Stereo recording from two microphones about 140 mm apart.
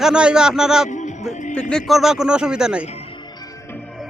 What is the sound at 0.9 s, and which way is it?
Music, 60° left (ahead or behind).